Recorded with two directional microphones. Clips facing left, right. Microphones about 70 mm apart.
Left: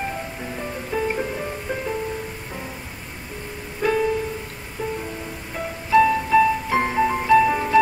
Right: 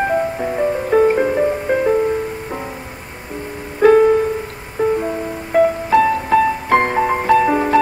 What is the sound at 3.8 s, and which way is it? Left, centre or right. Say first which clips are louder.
Music: right 11 dB; right.